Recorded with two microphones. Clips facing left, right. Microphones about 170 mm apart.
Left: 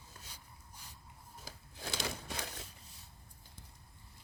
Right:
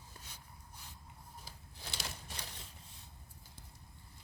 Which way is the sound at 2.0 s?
90° left.